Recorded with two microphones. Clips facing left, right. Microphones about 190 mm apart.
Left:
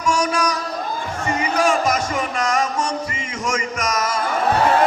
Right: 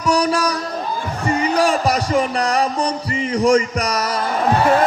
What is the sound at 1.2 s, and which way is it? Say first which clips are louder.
Speech: right 3 dB; 40° right (ahead or behind).